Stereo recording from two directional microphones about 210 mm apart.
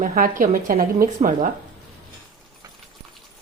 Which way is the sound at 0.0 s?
40° right (ahead or behind).